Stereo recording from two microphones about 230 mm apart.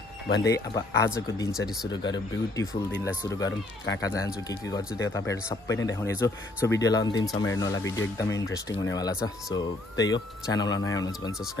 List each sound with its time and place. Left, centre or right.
0.4 s speech: centre